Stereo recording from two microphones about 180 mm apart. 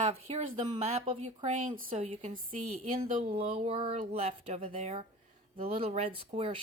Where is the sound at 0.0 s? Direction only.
35° right (ahead or behind).